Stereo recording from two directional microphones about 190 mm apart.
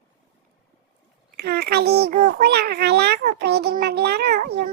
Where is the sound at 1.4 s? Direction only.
55° right (ahead or behind).